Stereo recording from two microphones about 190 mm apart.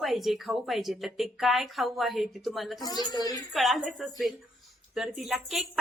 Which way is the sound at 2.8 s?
20° left (ahead or behind).